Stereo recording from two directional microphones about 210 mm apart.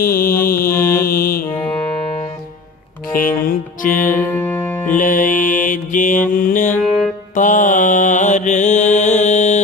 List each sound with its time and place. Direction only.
0.0 s mantra: 45° left (ahead or behind)
3.1 s music: 40° left (ahead or behind)
4.3 s music: 10° left (ahead or behind)
4.9 s mantra: 40° left (ahead or behind)